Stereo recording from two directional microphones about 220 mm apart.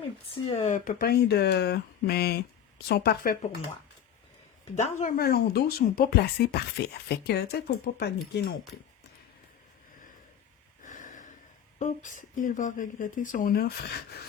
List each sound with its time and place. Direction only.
0.4 s speech: 30° left (ahead or behind); by 3.3 s 45° left (ahead or behind)
4.7 s speech: 30° left (ahead or behind); by 8.5 s 50° left (ahead or behind)
10.8 s snort: 35° left (ahead or behind)
11.8 s speech: 35° left (ahead or behind)